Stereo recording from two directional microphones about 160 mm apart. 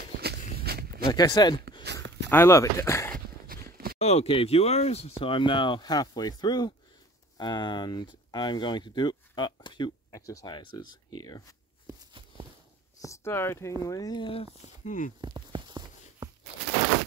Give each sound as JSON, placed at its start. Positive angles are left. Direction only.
{"t": 0.2, "sound": "walk", "side_deg": -85}
{"t": 1.0, "sound": "speech", "side_deg": 25}
{"t": 2.2, "sound": "speech", "side_deg": 15}
{"t": 3.7, "sound": "a sound", "side_deg": -70}
{"t": 4.0, "sound": "speech", "side_deg": 40}
{"t": 13.0, "sound": "speech", "side_deg": 15}
{"t": 14.9, "sound": "speech", "side_deg": 55}
{"t": 15.1, "sound": "a sound", "side_deg": -25}